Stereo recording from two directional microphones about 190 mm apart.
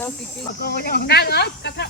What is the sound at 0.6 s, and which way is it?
Speech, 55° left (ahead or behind).